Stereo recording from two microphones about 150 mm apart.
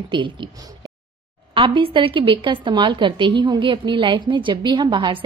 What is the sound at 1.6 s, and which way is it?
A woman's voice, 35° right (ahead or behind).